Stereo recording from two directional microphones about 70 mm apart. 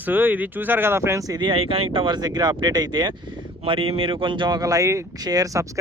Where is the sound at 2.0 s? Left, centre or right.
Right.